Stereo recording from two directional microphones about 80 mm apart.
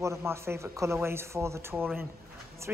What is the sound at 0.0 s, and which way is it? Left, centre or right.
Speech, right.